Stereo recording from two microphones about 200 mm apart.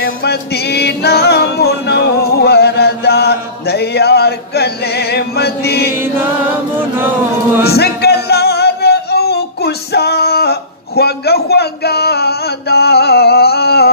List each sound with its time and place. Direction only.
0.0 s music: 55° left (ahead or behind)
5.9 s chant: 10° right (ahead or behind)
7.6 s singing: 55° left (ahead or behind)